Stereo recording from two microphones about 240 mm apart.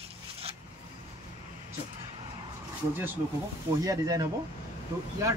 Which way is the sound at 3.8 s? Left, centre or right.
Centre.